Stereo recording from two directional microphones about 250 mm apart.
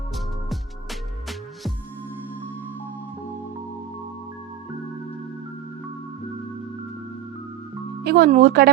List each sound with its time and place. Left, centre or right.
8.0 s speech: right